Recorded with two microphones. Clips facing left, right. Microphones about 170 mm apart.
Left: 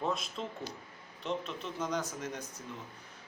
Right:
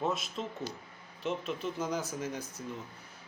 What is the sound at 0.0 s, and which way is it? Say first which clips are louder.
Speech: right 1 dB; 5° right (ahead or behind).